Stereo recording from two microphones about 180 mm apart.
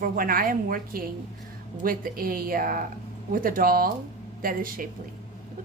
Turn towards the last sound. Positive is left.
turn(degrees=-50)  # may be behind; listen again after turning